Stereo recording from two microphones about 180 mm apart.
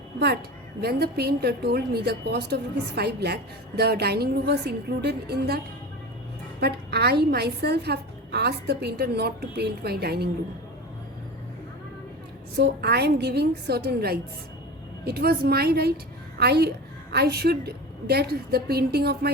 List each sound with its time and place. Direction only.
0.8 s a woman's voice: 60° right (ahead or behind)
6.6 s a woman's voice: 65° right (ahead or behind)
12.5 s a woman's voice: 70° right (ahead or behind)